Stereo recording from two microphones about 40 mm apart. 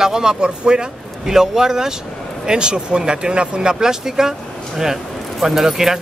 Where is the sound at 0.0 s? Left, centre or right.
Centre.